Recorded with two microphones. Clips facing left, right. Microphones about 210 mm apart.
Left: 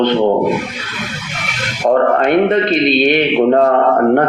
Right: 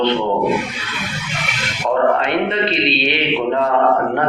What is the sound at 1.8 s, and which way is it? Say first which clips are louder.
A man's voice: left 4 dB; 50° left (ahead or behind).